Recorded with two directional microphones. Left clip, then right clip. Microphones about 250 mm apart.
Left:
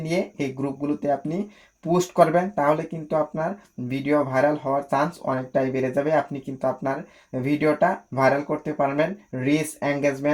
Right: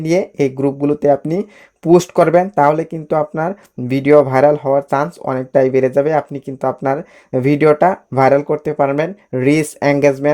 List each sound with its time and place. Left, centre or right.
0.0 s speech: right
3.8 s speech: right